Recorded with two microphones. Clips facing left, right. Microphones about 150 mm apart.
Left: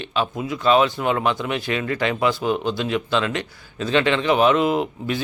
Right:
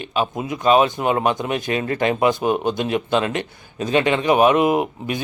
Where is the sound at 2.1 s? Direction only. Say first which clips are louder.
Right 3 dB; 20° right (ahead or behind).